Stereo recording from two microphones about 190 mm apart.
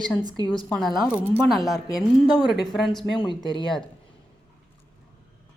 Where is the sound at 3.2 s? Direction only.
25° left (ahead or behind).